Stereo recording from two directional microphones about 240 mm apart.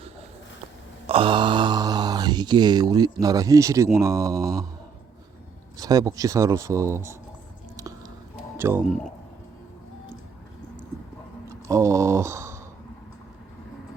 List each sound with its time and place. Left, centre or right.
1.0 s speech: right
5.7 s speech: centre
8.5 s speech: centre
11.4 s a sound: centre